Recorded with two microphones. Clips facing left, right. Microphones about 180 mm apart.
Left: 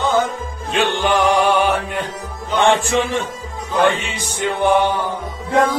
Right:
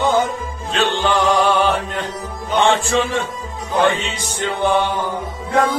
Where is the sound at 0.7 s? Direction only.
15° left (ahead or behind).